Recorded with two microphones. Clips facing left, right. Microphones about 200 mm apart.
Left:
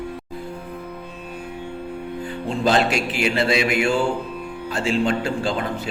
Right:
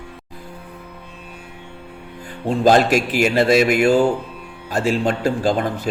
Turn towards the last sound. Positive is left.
turn(degrees=-40)  # may be behind; listen again after turning